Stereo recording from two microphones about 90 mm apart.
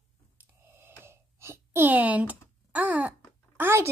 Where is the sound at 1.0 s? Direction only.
30° right (ahead or behind).